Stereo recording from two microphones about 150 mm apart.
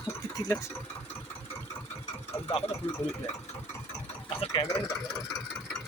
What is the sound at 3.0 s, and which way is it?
Speech, 45° left (ahead or behind).